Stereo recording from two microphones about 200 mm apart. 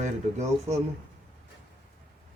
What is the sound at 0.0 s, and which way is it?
Speech, 35° right (ahead or behind).